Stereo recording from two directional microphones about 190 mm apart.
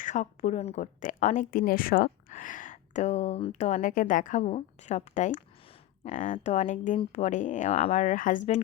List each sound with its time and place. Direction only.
0.0 s speech: 40° left (ahead or behind)